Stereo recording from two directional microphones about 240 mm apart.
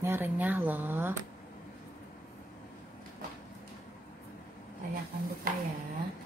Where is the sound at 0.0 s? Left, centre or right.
Centre.